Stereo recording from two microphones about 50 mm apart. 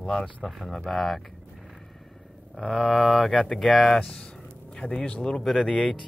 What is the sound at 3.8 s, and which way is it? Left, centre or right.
Speech, centre.